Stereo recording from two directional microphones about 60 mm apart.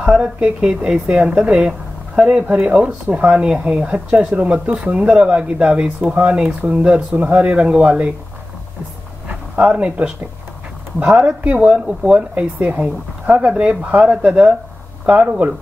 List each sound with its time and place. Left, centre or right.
0.0 s speech: centre
9.3 s speech: centre